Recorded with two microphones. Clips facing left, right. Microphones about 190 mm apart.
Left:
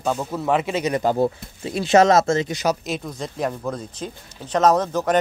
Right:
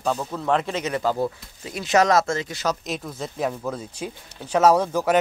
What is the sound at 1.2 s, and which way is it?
Speech, 30° left (ahead or behind).